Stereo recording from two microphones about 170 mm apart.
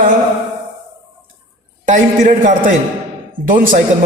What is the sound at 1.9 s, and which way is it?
A man's voice, 50° right (ahead or behind).